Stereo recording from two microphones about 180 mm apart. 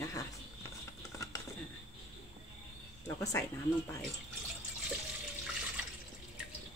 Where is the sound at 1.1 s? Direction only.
20° left (ahead or behind).